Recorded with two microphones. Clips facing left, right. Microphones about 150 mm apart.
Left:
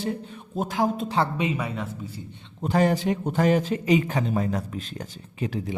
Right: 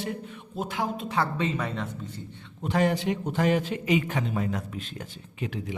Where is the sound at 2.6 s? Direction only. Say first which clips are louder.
Left 3 dB; 40° left (ahead or behind).